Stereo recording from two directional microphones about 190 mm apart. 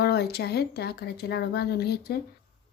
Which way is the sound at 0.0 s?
55° left (ahead or behind).